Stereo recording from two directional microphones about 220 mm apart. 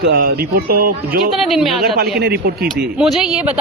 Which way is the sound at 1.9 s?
45° right (ahead or behind).